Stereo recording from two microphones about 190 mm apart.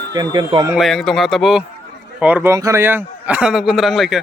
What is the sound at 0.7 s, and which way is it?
A man's voice, centre (ahead or behind).